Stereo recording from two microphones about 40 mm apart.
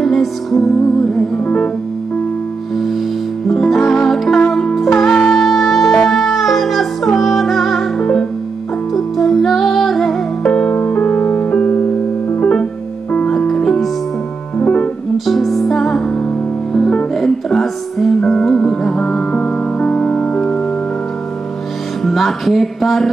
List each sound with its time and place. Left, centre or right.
0.0 s music: centre
1.4 s music: left
3.4 s music: centre
8.0 s music: centre
8.9 s music: centre
10.4 s music: left
10.8 s music: left
13.3 s music: centre
15.2 s music: centre
17.2 s music: centre; by 20.2 s left
22.0 s music: centre